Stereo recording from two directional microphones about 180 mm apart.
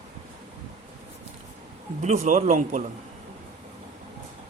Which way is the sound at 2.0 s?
40° right (ahead or behind).